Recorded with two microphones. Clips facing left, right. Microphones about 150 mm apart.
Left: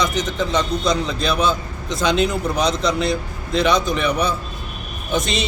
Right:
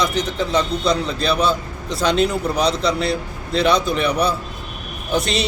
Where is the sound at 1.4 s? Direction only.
30° right (ahead or behind).